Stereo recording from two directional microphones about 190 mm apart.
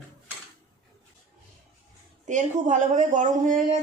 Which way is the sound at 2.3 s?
40° right (ahead or behind).